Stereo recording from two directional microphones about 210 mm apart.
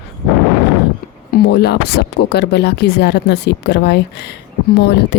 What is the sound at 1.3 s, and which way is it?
Speech, 50° left (ahead or behind).